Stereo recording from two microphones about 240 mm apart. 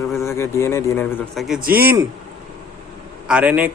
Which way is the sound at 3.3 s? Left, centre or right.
Centre.